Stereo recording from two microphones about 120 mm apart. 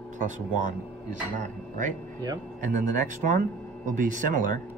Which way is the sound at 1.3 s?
90° right.